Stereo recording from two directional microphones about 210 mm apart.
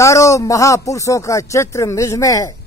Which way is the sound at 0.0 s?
15° left (ahead or behind).